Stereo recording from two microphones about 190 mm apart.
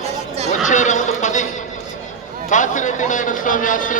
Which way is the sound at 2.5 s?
40° left (ahead or behind).